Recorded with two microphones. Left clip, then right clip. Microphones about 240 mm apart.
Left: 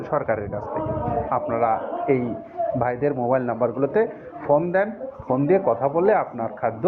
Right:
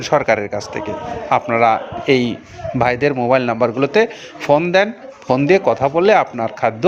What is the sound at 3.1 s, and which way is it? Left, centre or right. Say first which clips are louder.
Speech: right 7 dB; right.